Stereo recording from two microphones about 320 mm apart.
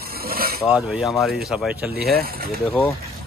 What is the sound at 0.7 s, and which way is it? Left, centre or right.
Speech, centre.